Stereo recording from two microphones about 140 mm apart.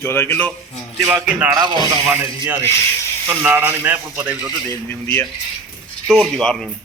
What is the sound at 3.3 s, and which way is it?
Speech, 15° right (ahead or behind).